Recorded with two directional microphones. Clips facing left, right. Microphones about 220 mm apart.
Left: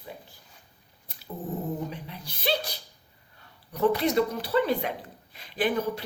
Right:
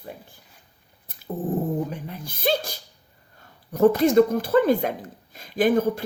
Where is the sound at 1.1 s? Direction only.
50° right (ahead or behind).